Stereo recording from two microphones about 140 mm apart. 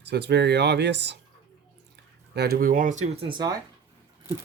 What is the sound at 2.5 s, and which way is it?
Speech, 85° right.